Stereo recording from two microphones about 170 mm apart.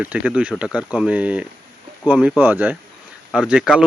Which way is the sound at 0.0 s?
10° right (ahead or behind).